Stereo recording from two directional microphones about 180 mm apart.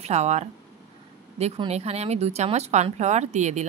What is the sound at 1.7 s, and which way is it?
A woman's voice, 35° right (ahead or behind).